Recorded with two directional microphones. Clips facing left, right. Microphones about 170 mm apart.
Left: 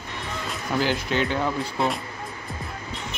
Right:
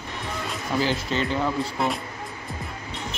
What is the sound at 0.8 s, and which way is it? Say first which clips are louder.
Speech: left 1 dB; centre (ahead or behind).